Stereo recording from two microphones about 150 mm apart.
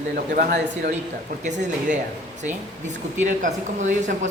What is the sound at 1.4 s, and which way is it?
Speech, 50° right (ahead or behind).